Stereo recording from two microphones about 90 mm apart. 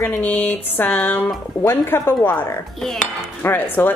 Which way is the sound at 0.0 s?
20° left (ahead or behind).